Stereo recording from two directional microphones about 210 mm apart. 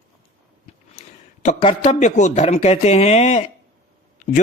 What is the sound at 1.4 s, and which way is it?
Speech, 30° left (ahead or behind).